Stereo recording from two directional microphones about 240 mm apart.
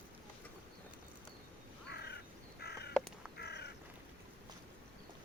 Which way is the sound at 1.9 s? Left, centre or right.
Left.